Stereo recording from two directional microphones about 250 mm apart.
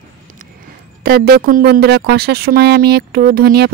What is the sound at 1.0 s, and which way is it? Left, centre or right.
Speech, right.